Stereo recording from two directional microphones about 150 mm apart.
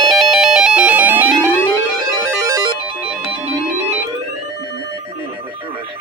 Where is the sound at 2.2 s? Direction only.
20° right (ahead or behind).